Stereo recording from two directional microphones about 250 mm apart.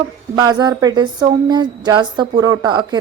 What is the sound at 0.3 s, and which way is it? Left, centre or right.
A woman's voice, centre.